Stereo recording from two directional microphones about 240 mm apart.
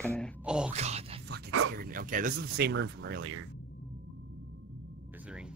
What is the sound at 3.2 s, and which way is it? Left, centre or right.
Speech, right.